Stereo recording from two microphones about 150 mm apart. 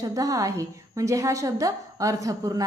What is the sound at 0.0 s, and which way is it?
A woman's voice, 20° right (ahead or behind).